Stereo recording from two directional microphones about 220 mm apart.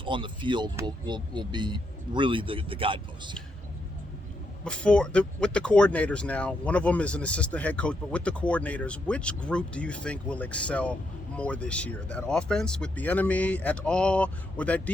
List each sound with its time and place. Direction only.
0.0 s speech: 20° right (ahead or behind)
4.6 s speech: 5° left (ahead or behind)